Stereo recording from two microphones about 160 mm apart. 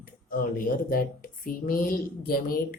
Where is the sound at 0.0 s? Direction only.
60° left (ahead or behind).